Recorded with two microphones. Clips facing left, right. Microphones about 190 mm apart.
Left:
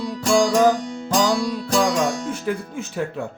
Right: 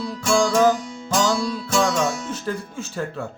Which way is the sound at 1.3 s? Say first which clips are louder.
Left 2 dB; 35° left (ahead or behind).